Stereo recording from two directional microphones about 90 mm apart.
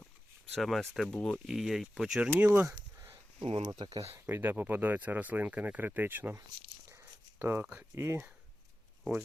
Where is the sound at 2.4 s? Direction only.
20° right (ahead or behind).